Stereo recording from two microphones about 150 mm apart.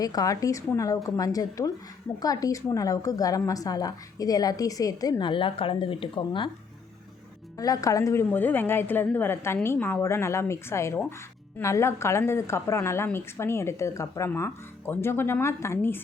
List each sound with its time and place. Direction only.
0.0 s a woman's voice: 25° left (ahead or behind)
7.6 s a woman's voice: 25° left (ahead or behind)